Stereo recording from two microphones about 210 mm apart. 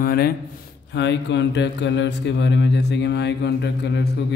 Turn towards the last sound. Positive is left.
turn(degrees=55)  # may be behind; listen again after turning